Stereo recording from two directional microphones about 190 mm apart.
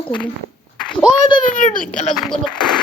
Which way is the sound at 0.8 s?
5° left (ahead or behind).